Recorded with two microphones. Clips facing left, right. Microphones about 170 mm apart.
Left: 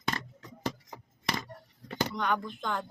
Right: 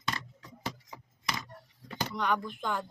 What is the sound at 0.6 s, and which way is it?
Chop, 50° left (ahead or behind).